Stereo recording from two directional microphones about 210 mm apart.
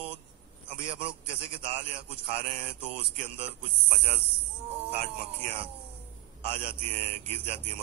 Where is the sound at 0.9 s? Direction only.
25° right (ahead or behind).